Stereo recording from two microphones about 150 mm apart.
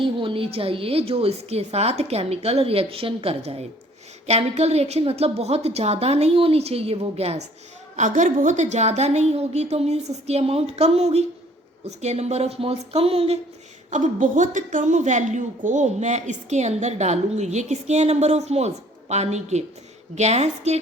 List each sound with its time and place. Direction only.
0.0 s a woman's voice: 35° right (ahead or behind)
7.9 s a woman's voice: 55° right (ahead or behind)
13.9 s a woman's voice: 55° right (ahead or behind)